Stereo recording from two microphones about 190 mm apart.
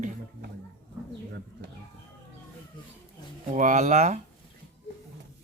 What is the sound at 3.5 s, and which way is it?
Speech, 40° right (ahead or behind).